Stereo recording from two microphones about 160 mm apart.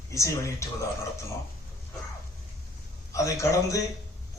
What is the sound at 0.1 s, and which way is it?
Speech, 20° left (ahead or behind).